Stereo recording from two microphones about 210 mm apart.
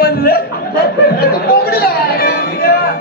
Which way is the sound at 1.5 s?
45° left (ahead or behind).